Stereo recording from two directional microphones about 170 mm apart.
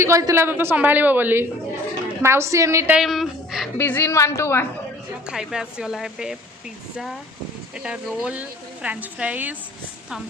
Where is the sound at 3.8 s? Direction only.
10° left (ahead or behind).